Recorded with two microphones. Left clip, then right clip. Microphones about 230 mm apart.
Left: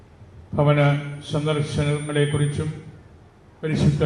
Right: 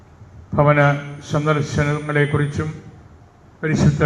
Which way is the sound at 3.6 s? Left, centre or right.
Right.